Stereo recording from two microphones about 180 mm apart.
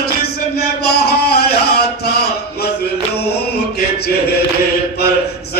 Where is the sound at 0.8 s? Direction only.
65° left (ahead or behind).